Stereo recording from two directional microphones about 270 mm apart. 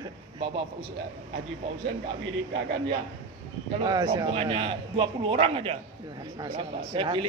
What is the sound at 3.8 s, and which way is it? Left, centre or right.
A man's voice, centre.